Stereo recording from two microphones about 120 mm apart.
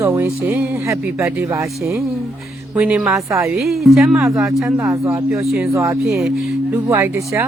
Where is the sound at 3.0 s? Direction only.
25° right (ahead or behind).